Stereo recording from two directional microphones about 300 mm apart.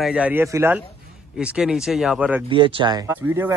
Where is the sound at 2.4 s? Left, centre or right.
Centre.